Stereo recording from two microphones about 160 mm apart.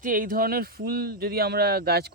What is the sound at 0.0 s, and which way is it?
Speech, 60° right (ahead or behind).